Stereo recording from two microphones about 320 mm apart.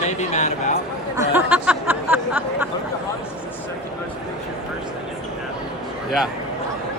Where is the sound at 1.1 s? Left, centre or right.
Centre.